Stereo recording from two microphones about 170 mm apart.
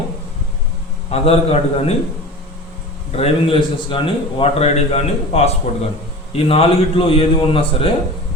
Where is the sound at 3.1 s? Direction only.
35° left (ahead or behind).